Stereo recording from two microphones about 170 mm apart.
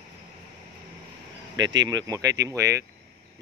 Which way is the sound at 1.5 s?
90° right.